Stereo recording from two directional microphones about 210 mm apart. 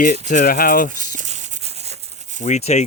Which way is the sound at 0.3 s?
40° left (ahead or behind).